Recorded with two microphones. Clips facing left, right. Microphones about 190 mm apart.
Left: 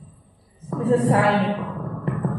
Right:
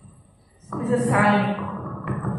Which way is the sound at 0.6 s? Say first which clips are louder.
Left 3 dB; 30° left (ahead or behind).